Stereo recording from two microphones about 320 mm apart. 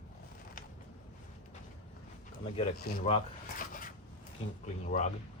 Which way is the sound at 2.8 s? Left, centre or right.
Left.